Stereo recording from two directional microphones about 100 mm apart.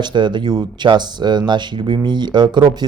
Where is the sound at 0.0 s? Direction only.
50° right (ahead or behind).